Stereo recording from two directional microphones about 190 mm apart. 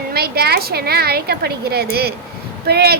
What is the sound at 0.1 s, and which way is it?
A woman's voice, 55° right (ahead or behind).